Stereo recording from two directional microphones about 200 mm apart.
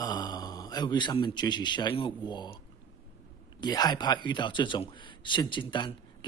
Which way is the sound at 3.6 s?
20° left (ahead or behind).